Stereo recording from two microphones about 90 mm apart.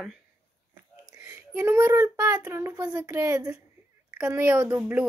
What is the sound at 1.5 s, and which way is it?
A child's voice, 30° right (ahead or behind).